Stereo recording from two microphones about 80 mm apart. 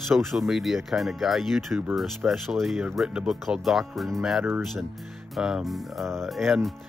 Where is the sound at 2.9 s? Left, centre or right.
Centre.